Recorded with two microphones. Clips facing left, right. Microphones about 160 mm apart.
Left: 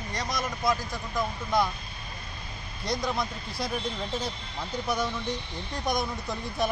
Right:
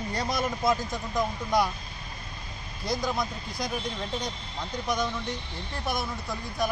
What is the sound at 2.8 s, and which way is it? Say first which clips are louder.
Speech: right 1 dB; centre (ahead or behind).